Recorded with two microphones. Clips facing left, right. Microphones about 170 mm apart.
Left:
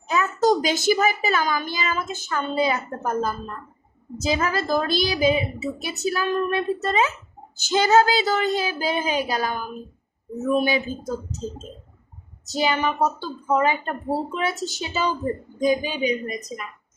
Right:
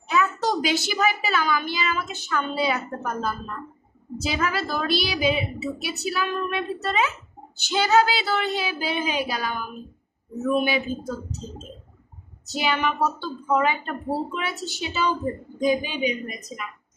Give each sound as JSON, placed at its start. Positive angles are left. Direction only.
{"t": 0.1, "sound": "a woman's voice", "side_deg": 40}
{"t": 12.5, "sound": "a woman's voice", "side_deg": 40}